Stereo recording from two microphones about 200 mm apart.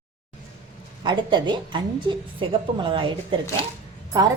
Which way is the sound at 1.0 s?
20° right (ahead or behind).